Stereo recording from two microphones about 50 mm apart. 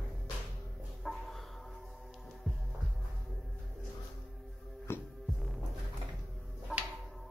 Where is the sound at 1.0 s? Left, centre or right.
Centre.